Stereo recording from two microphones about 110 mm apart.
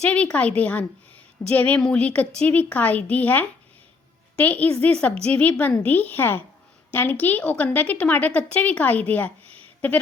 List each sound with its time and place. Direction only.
0.0 s a woman's voice: 10° left (ahead or behind)